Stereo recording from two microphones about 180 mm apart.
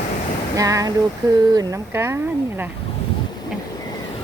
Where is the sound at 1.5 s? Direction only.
15° right (ahead or behind).